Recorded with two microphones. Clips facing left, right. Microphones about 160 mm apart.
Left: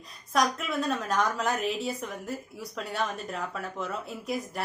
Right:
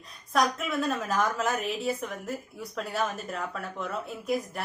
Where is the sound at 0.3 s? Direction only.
Centre (ahead or behind).